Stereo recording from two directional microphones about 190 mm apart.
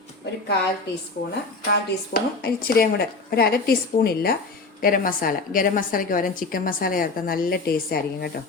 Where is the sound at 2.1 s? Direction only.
55° left (ahead or behind).